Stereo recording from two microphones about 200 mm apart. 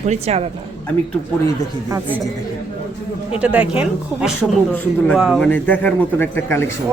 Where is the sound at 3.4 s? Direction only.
5° right (ahead or behind); by 6.7 s 10° left (ahead or behind).